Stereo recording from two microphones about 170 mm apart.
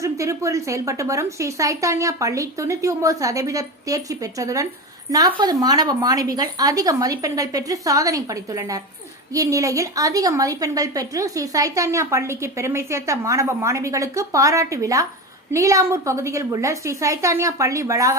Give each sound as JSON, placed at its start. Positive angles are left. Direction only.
{"t": 0.0, "sound": "a woman's voice", "side_deg": -20}